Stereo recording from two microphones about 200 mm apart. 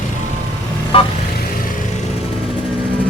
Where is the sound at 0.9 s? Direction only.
25° left (ahead or behind).